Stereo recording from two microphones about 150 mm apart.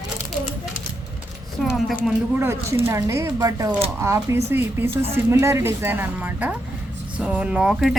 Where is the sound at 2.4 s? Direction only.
15° right (ahead or behind).